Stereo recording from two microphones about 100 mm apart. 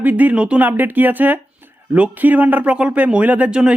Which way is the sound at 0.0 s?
15° right (ahead or behind).